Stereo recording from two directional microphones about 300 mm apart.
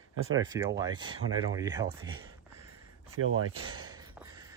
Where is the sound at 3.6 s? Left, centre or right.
Centre.